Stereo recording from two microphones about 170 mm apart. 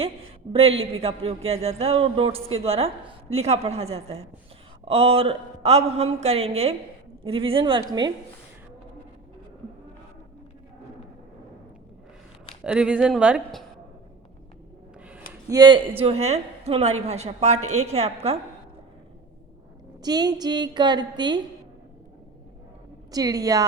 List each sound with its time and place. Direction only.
0.5 s a man's voice: 35° right (ahead or behind)
12.6 s speech: 5° right (ahead or behind)
15.4 s a woman's voice: 25° right (ahead or behind)
16.0 s a man's voice: 35° right (ahead or behind)
20.0 s a woman's voice: 25° right (ahead or behind)
23.1 s a woman's voice: 20° right (ahead or behind)